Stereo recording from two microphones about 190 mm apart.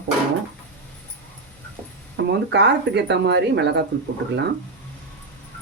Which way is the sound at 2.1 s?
65° right (ahead or behind).